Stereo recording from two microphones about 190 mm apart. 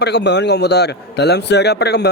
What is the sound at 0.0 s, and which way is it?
A man's voice, 65° left (ahead or behind).